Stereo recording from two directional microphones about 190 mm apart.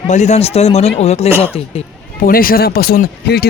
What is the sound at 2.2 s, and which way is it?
Speech, 50° left (ahead or behind).